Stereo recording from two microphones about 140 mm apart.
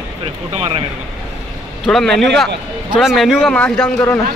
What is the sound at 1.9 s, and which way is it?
A man's voice, centre (ahead or behind).